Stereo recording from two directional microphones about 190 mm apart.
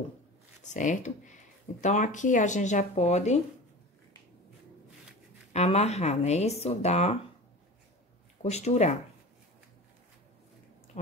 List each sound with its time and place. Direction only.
0.6 s speech: 40° left (ahead or behind)
5.5 s speech: 35° left (ahead or behind)
8.4 s speech: 35° left (ahead or behind)